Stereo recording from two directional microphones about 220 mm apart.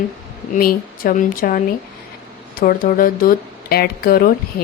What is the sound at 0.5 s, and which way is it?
Speech, 40° left (ahead or behind).